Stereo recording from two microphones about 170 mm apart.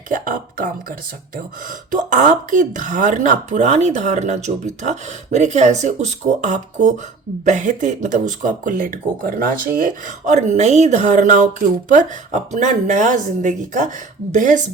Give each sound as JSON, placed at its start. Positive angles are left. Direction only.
{"t": 0.1, "sound": "speech", "side_deg": -50}